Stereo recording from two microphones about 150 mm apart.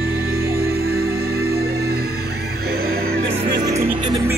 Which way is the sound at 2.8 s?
80° right.